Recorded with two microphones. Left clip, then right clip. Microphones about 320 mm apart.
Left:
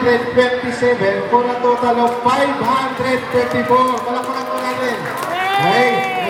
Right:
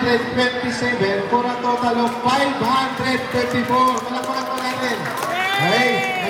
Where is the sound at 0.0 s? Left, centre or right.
Centre.